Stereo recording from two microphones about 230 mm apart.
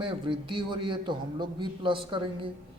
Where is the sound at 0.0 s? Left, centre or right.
Right.